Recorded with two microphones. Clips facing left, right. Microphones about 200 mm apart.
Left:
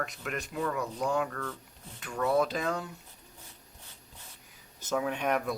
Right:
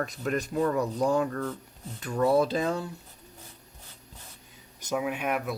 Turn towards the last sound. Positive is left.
turn(degrees=-5)  # may be behind; listen again after turning